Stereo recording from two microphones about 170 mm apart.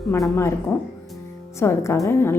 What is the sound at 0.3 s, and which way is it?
A woman's voice, 15° left (ahead or behind).